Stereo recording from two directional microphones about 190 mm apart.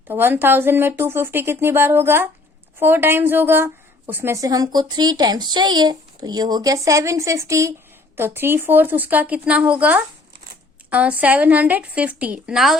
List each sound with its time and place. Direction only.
0.1 s speech: 10° right (ahead or behind)